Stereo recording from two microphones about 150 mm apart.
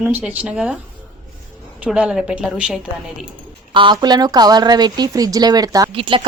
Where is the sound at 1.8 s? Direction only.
5° right (ahead or behind).